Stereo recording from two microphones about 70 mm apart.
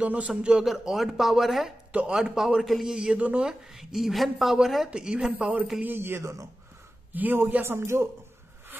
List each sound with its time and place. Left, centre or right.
0.0 s a man's voice: right
0.4 s speech: centre
1.9 s speech: centre
3.4 s speech: centre
4.9 s speech: centre
5.9 s a man's voice: right